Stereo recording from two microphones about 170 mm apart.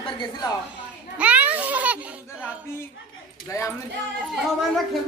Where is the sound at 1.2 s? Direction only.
10° right (ahead or behind).